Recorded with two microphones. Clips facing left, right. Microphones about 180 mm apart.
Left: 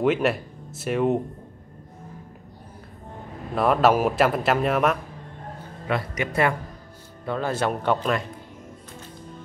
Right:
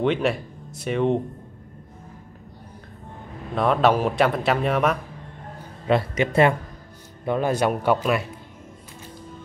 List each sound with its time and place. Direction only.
0.0 s speech: 5° left (ahead or behind)
3.5 s speech: 5° left (ahead or behind)
5.9 s speech: 25° right (ahead or behind)
7.2 s speech: 15° right (ahead or behind)